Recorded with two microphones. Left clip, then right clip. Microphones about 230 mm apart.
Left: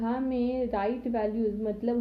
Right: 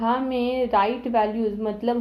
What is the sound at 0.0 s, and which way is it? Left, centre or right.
A woman's voice, centre.